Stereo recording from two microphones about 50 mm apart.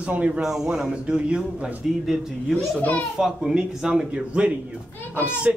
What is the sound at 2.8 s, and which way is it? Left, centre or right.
Speech, left.